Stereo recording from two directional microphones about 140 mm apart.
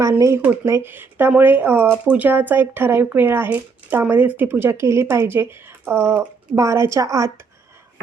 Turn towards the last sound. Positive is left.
turn(degrees=-20)  # may be behind; listen again after turning